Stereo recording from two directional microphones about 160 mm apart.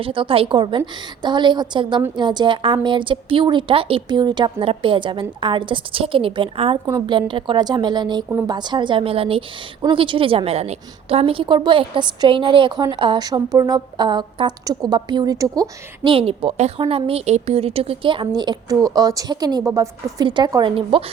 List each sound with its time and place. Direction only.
0.0 s a woman's voice: 35° right (ahead or behind)
8.3 s speech: 15° right (ahead or behind)
8.5 s a woman's voice: 30° right (ahead or behind)
16.0 s a woman's voice: 35° right (ahead or behind)